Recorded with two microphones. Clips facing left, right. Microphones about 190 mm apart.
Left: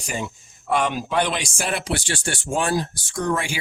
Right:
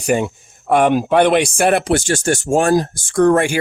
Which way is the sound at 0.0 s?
60° right (ahead or behind).